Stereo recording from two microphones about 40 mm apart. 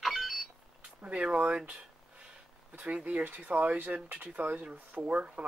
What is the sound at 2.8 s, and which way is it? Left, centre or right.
Speech, right.